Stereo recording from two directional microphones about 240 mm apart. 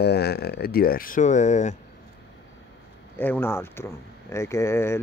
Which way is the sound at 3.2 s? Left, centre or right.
Centre.